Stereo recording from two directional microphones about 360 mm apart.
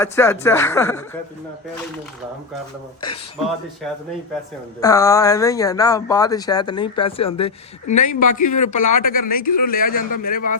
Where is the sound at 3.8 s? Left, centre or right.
Centre.